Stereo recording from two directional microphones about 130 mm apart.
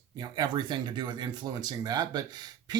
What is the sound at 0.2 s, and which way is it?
Speech, 30° right (ahead or behind).